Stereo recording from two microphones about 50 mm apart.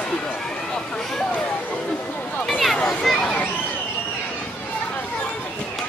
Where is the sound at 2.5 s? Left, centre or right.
Centre.